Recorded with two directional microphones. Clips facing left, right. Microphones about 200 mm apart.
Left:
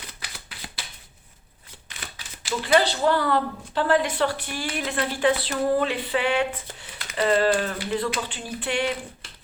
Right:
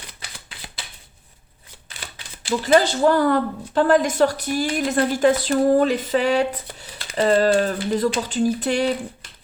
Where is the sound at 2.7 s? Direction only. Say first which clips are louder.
Right 4 dB; 45° right (ahead or behind).